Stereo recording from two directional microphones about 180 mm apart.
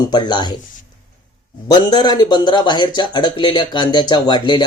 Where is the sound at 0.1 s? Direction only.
25° left (ahead or behind).